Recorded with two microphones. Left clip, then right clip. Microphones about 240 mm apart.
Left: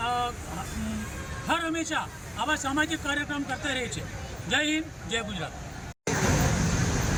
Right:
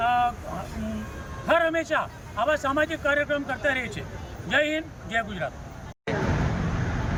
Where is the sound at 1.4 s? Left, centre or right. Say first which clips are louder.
Right 6 dB; centre.